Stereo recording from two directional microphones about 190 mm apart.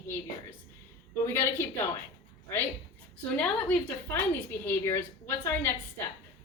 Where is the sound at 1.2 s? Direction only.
15° left (ahead or behind).